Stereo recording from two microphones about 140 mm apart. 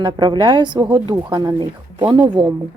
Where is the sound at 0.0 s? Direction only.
35° right (ahead or behind).